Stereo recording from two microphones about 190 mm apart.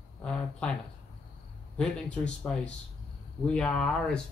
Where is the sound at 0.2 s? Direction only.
5° left (ahead or behind).